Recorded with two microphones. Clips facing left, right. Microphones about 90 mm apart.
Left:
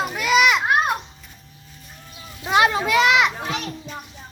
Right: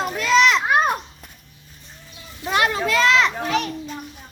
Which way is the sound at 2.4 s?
20° left (ahead or behind).